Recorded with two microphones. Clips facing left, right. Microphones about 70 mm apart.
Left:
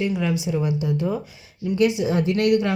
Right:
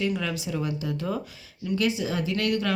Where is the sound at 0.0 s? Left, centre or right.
Centre.